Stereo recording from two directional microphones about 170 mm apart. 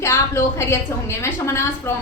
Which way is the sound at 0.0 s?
15° left (ahead or behind).